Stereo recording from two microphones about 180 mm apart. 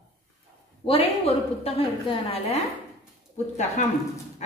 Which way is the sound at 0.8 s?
30° left (ahead or behind).